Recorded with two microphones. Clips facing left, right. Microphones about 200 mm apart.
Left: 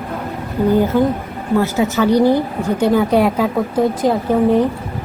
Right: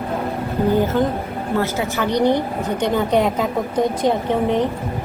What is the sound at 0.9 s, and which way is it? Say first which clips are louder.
A woman's voice: left 3 dB; 10° left (ahead or behind).